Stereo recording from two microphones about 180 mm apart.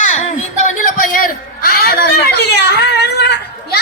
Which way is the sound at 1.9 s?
65° left (ahead or behind).